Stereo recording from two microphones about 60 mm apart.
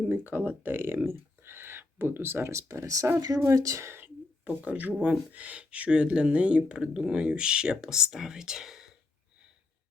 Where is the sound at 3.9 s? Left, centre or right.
Right; by 8.9 s centre.